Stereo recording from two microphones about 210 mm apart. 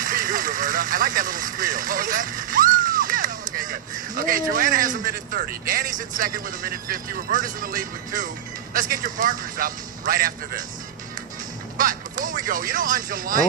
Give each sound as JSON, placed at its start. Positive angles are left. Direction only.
{"t": 0.0, "sound": "a man's voice", "side_deg": -40}
{"t": 11.8, "sound": "speech", "side_deg": -40}